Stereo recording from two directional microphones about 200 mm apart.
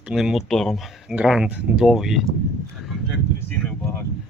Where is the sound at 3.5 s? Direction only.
10° left (ahead or behind).